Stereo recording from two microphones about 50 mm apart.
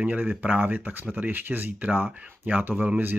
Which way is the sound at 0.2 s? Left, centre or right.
Right.